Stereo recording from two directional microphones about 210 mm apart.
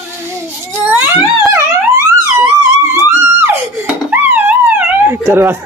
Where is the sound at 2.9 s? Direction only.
10° right (ahead or behind).